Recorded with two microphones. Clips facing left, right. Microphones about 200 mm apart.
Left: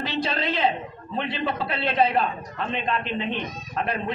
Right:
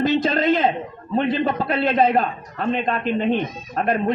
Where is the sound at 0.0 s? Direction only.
45° right (ahead or behind).